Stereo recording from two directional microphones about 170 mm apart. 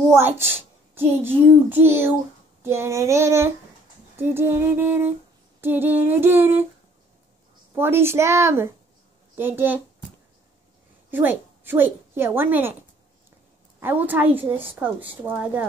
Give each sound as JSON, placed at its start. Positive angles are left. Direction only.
{"t": 0.4, "sound": "a woman's voice", "side_deg": -15}
{"t": 7.7, "sound": "a woman's voice", "side_deg": -15}
{"t": 11.1, "sound": "a woman's voice", "side_deg": -10}
{"t": 13.7, "sound": "a woman's voice", "side_deg": -10}